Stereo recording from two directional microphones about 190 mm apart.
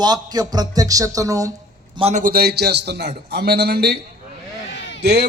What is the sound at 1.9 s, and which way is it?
Speech, 30° right (ahead or behind).